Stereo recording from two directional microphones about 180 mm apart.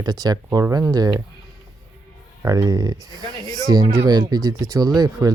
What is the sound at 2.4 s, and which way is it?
Speech, 20° right (ahead or behind).